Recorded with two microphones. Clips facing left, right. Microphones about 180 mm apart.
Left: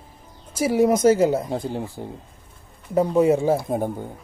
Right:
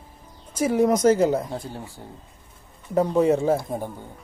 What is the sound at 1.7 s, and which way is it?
Speech, 30° left (ahead or behind).